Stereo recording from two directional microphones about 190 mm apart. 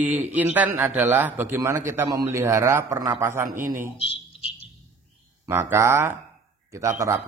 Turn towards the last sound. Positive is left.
turn(degrees=-15)  # may be behind; listen again after turning